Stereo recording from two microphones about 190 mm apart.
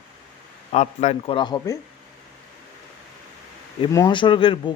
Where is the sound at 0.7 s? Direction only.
35° left (ahead or behind); by 1.8 s 20° left (ahead or behind).